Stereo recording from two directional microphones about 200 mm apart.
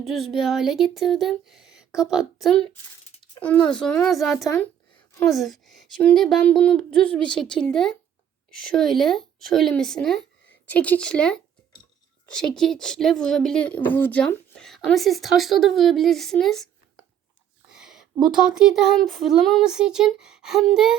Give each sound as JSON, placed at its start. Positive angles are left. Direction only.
{"t": 0.0, "sound": "a woman's voice", "side_deg": 0}
{"t": 3.2, "sound": "a sound", "side_deg": 5}
{"t": 3.7, "sound": "a woman's voice", "side_deg": 5}
{"t": 4.4, "sound": "speech", "side_deg": 15}
{"t": 5.2, "sound": "a woman's voice", "side_deg": 0}
{"t": 17.7, "sound": "speech", "side_deg": -5}